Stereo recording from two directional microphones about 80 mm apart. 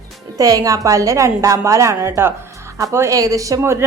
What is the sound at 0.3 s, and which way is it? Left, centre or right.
A woman's voice, right.